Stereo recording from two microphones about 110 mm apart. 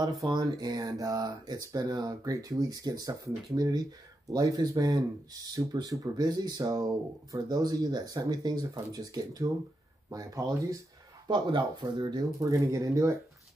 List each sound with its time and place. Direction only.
0.0 s speech: 40° right (ahead or behind)
11.2 s speech: 45° right (ahead or behind); by 13.2 s 30° right (ahead or behind)